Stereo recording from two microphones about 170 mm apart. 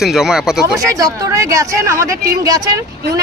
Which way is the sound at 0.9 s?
20° right (ahead or behind).